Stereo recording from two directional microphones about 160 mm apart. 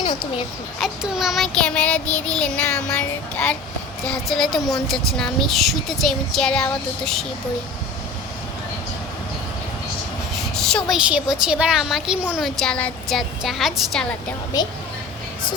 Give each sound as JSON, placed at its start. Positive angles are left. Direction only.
{"t": 0.0, "sound": "a sound", "side_deg": 30}
{"t": 0.8, "sound": "a woman's voice", "side_deg": -5}
{"t": 10.5, "sound": "a woman's voice", "side_deg": 5}